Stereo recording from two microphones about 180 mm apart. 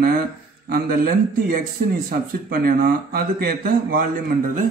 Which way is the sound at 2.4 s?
55° right (ahead or behind).